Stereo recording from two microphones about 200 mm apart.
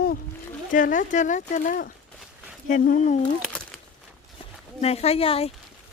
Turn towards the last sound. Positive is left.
turn(degrees=30)  # may be behind; listen again after turning